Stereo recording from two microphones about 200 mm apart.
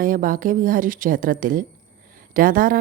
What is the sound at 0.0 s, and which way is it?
A woman's voice, 45° right (ahead or behind).